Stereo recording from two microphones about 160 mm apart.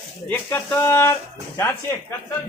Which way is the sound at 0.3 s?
15° left (ahead or behind).